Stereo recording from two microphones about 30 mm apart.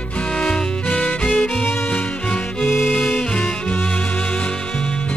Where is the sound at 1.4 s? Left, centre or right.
Left.